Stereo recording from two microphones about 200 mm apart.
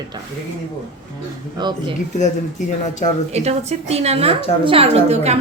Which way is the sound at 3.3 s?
35° right (ahead or behind).